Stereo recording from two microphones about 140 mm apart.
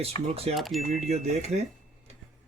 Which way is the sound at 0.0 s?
45° right (ahead or behind).